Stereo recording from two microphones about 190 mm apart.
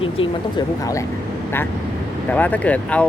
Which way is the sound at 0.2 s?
30° left (ahead or behind).